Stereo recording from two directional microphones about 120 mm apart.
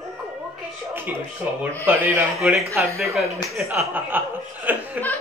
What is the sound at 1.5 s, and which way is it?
Speech, 15° right (ahead or behind).